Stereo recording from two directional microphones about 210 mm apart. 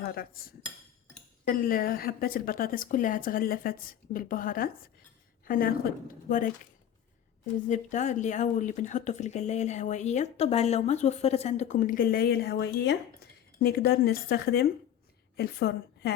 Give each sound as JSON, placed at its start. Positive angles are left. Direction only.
{"t": 0.0, "sound": "a woman's voice", "side_deg": 45}
{"t": 7.7, "sound": "a woman's voice", "side_deg": 35}